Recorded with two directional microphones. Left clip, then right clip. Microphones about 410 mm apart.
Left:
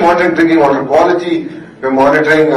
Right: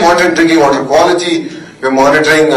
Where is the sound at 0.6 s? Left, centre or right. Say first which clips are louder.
Right 1 dB; centre.